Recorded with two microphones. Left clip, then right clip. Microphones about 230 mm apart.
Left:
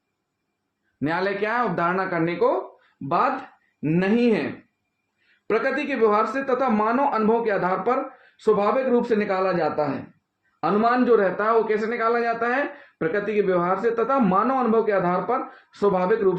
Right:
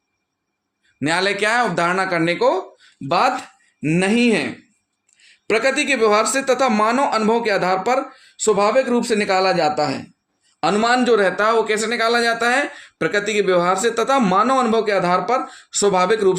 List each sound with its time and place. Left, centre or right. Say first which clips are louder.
0.9 s a man's voice: right 5 dB; right
3.8 s a man's voice: right 3 dB; right
5.5 s a man's voice: right 6 dB; right